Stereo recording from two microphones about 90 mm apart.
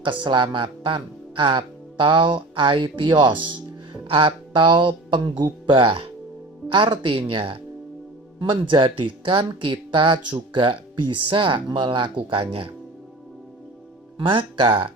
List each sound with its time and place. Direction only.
0.3 s speech: 65° right (ahead or behind)
4.0 s music: 85° right; by 5.5 s 60° right (ahead or behind)
5.6 s speech: 80° right
6.7 s speech: 75° right (ahead or behind)
8.6 s speech: 70° right (ahead or behind); by 12.7 s 90° right
14.2 s speech: 75° right (ahead or behind)